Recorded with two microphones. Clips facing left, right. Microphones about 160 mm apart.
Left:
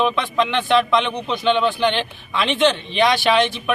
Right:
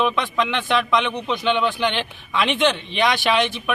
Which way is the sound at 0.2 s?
10° right (ahead or behind).